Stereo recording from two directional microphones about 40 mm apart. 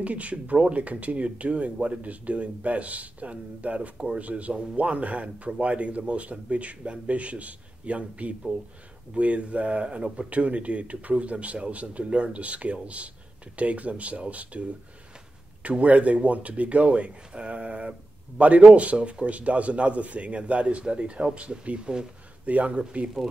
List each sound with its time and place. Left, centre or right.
0.0 s a man's voice: right
15.8 s a man's voice: right